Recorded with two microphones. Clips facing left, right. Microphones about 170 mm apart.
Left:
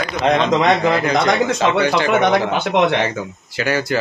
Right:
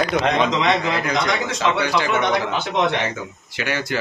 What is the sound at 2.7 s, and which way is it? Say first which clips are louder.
Speech: left 5 dB; 65° left (ahead or behind).